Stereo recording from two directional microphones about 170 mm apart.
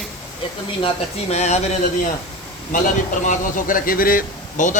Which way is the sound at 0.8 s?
40° left (ahead or behind).